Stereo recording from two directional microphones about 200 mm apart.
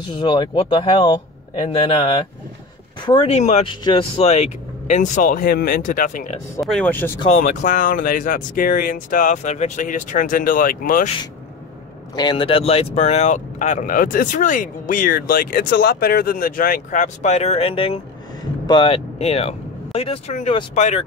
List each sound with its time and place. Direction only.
0.2 s speech: 25° left (ahead or behind); by 6.3 s 40° left (ahead or behind)
6.6 s speech: 5° left (ahead or behind)
7.2 s speech: 35° left (ahead or behind)
12.2 s speech: 25° left (ahead or behind)